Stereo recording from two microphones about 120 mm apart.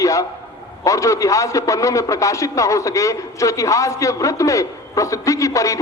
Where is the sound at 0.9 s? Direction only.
25° left (ahead or behind).